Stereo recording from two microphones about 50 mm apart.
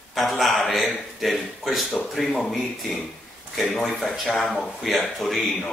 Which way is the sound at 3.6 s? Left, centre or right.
Centre.